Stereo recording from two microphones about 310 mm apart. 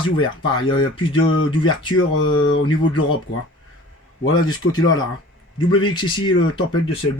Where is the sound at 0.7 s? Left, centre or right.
Centre.